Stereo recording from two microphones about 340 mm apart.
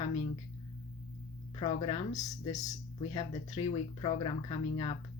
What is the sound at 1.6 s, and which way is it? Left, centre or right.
Speech, centre.